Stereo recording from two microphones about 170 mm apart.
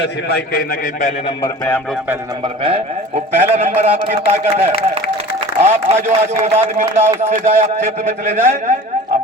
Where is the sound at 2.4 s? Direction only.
30° right (ahead or behind).